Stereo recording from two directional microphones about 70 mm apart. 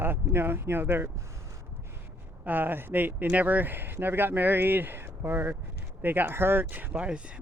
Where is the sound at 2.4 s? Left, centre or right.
Right.